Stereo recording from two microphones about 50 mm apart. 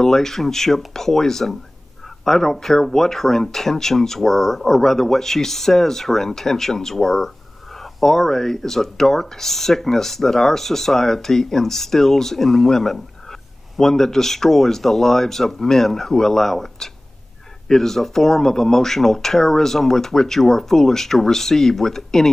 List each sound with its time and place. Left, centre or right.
0.0 s speech: centre